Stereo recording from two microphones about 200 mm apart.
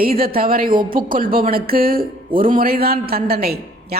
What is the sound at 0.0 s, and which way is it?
Speech, 45° right (ahead or behind).